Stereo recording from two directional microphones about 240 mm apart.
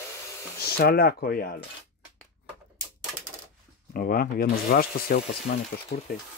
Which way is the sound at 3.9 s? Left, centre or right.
Left.